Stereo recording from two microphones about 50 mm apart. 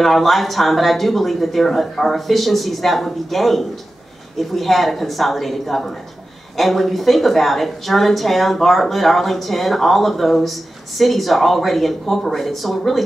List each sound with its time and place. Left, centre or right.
0.0 s a woman's voice: centre